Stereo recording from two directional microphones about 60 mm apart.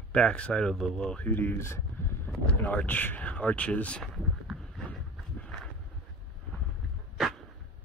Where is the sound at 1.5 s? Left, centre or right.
Left.